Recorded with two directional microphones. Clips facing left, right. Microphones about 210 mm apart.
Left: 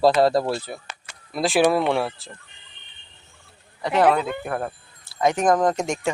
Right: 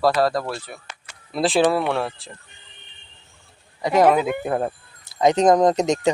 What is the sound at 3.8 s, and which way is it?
Speech, 10° right (ahead or behind).